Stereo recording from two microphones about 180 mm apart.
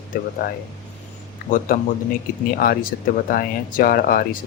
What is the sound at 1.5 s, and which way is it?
Speech, 50° left (ahead or behind).